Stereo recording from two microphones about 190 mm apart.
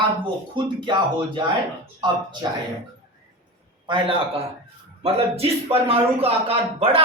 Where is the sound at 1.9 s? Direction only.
25° right (ahead or behind).